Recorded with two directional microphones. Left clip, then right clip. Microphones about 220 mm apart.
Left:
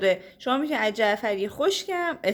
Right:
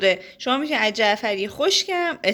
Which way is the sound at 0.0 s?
5° right (ahead or behind).